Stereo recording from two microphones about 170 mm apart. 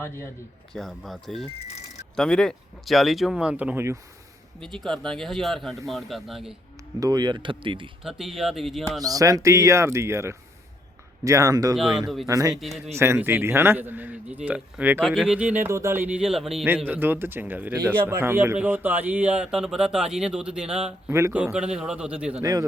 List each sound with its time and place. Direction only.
0.7 s speech: centre (ahead or behind)
4.6 s speech: centre (ahead or behind)
7.0 s speech: 25° right (ahead or behind)
8.0 s speech: centre (ahead or behind)
9.0 s speech: 20° right (ahead or behind)
11.8 s speech: 5° right (ahead or behind)
12.3 s speech: 20° right (ahead or behind)
12.5 s speech: centre (ahead or behind)
13.0 s speech: 15° right (ahead or behind)
22.4 s speech: 20° right (ahead or behind)